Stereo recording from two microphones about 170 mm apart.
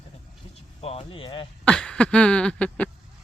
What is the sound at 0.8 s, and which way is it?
Speech, 35° left (ahead or behind).